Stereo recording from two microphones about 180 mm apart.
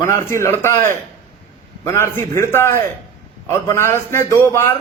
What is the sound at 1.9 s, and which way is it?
A man's voice, 15° left (ahead or behind).